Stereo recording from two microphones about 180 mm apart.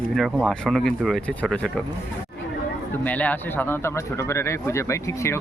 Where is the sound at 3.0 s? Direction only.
10° left (ahead or behind).